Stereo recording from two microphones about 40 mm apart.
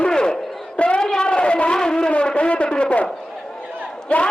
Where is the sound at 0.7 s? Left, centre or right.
Left.